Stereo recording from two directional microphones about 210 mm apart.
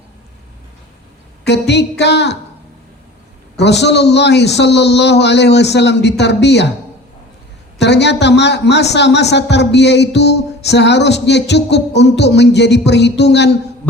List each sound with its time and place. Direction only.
1.5 s a sound: 55° left (ahead or behind)
3.6 s a man's voice: 55° left (ahead or behind)
7.8 s a man's voice: 55° left (ahead or behind)